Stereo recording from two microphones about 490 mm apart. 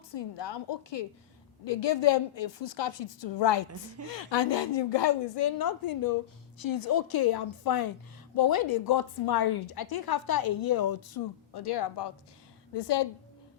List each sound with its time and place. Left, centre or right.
0.1 s a woman's voice: left